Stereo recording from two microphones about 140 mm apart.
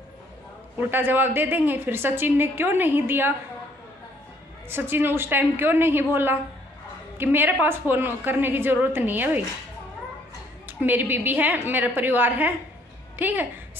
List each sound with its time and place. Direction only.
0.7 s a woman's voice: 15° right (ahead or behind)
4.6 s a woman's voice: 15° right (ahead or behind)
10.7 s a woman's voice: 15° right (ahead or behind)